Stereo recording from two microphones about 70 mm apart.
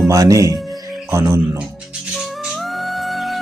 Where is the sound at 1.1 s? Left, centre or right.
Right.